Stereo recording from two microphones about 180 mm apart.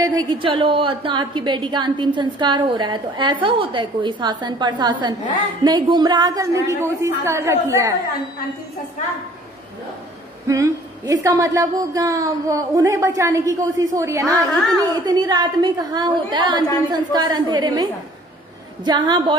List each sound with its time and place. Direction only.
0.0 s a woman's voice: 20° right (ahead or behind)
10.4 s a woman's voice: 20° right (ahead or behind)
18.9 s a woman's voice: 25° right (ahead or behind)